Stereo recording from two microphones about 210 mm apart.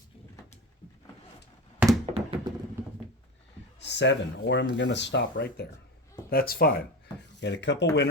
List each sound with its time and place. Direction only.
1.8 s thunk: 10° right (ahead or behind)
2.1 s a sound: 25° right (ahead or behind)
3.8 s speech: 55° left (ahead or behind)
7.3 s speech: 55° left (ahead or behind)